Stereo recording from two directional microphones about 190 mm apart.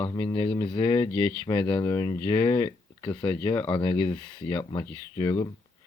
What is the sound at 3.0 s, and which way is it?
Speech, 25° left (ahead or behind).